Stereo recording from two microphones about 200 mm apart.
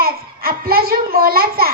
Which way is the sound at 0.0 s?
50° right (ahead or behind).